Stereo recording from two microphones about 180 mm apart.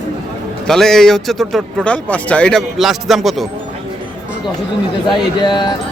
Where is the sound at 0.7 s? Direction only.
5° left (ahead or behind).